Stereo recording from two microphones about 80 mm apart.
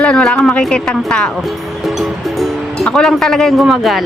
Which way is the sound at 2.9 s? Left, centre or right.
Centre.